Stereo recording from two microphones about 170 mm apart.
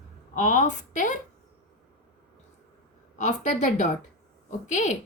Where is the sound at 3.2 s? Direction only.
45° left (ahead or behind).